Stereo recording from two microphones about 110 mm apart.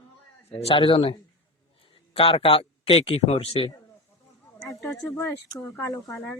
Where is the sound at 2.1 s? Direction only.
55° left (ahead or behind).